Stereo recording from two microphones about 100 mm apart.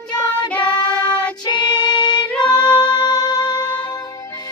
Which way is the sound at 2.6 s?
45° left (ahead or behind).